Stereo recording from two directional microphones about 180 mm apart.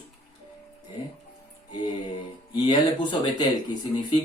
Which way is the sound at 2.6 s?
25° left (ahead or behind).